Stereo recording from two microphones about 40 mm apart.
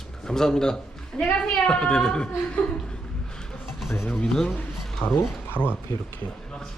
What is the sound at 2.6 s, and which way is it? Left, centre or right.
Speech, left.